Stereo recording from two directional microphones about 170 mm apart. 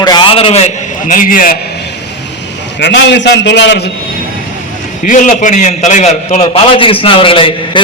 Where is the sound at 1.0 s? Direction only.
50° left (ahead or behind).